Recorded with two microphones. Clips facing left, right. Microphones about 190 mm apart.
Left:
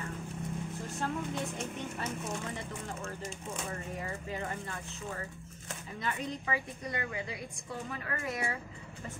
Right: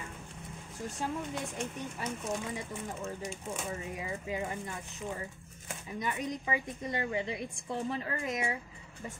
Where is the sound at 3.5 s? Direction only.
10° right (ahead or behind).